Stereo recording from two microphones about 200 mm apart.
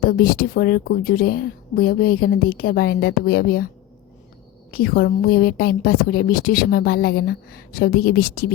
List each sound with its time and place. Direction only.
0.0 s a woman's voice: 45° left (ahead or behind)
4.7 s a woman's voice: 50° left (ahead or behind)